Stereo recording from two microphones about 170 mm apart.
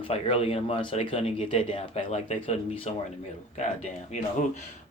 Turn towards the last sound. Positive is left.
turn(degrees=45)  # may be behind; listen again after turning